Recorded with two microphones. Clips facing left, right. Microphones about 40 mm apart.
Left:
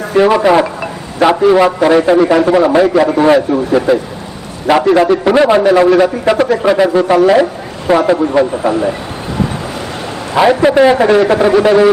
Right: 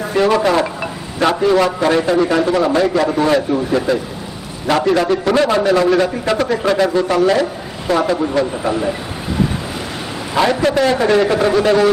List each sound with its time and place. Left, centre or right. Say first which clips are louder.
0.2 s a man's voice: left 5 dB; centre
0.6 s vehicle: left 3 dB; centre
1.4 s a man's voice: left 5 dB; centre
4.9 s a man's voice: left 5 dB; centre
5.9 s a man's voice: left 5 dB; centre
10.3 s a man's voice: left 6 dB; centre